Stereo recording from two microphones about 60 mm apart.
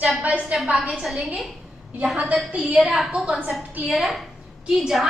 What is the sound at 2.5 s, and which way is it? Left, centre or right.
Speech, centre.